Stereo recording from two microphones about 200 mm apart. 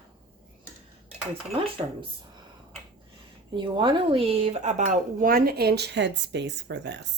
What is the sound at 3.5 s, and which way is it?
Speech, 25° right (ahead or behind).